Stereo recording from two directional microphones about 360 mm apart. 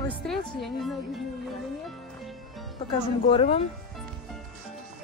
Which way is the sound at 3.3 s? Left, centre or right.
Centre.